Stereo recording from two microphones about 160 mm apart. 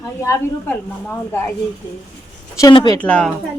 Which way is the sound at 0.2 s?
15° left (ahead or behind).